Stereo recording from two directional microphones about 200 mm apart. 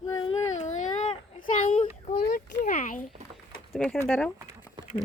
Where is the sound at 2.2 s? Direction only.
50° left (ahead or behind).